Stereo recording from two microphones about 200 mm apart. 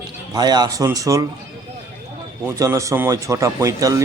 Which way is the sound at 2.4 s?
15° right (ahead or behind).